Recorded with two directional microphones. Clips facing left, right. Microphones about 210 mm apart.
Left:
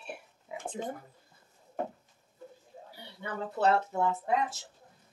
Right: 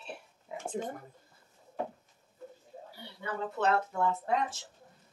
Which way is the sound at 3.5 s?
35° left (ahead or behind).